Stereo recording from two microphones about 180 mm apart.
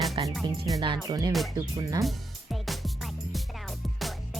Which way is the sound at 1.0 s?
20° right (ahead or behind).